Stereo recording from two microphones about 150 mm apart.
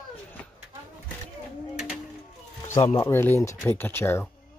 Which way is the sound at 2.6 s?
15° left (ahead or behind).